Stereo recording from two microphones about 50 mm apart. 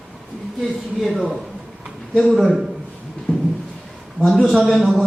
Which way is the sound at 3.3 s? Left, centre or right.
Left.